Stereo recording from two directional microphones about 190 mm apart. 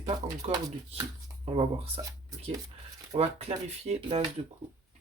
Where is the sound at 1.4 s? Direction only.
30° right (ahead or behind).